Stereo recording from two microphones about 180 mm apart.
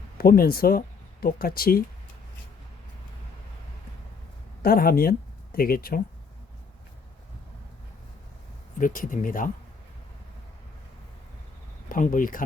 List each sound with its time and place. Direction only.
0.2 s speech: 55° left (ahead or behind)
4.6 s speech: 55° left (ahead or behind)
8.8 s speech: 50° left (ahead or behind)
11.9 s speech: 50° left (ahead or behind)